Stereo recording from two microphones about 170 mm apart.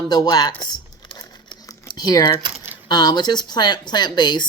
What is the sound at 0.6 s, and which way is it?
Crumpling, 25° left (ahead or behind).